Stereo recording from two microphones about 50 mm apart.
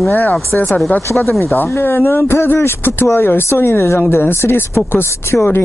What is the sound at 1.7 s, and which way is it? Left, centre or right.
Speech, left.